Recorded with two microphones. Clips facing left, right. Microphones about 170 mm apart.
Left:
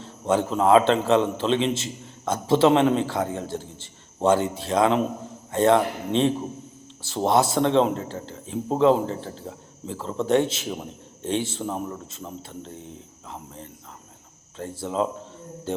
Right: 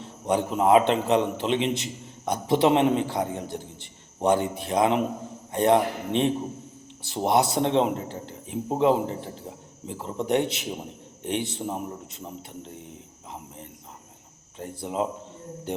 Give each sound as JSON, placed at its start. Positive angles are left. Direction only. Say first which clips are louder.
{"t": 0.0, "sound": "a man's voice", "louder": "left 2 dB", "side_deg": -15}
{"t": 14.6, "sound": "a man's voice", "louder": "left 3 dB", "side_deg": -20}